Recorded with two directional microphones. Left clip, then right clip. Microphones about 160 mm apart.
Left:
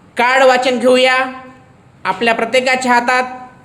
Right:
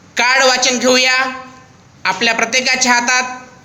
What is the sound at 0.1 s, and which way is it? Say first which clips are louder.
A woman's voice: left 2 dB; 25° left (ahead or behind).